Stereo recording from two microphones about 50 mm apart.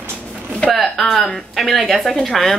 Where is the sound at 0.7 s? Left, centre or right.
Centre.